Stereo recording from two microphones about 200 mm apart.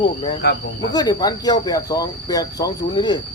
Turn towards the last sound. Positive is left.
turn(degrees=20)  # may be behind; listen again after turning